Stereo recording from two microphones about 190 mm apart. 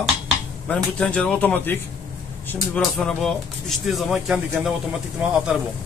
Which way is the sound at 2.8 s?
Centre (ahead or behind).